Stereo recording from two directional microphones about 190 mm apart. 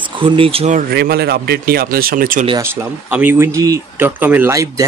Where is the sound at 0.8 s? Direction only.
55° right (ahead or behind).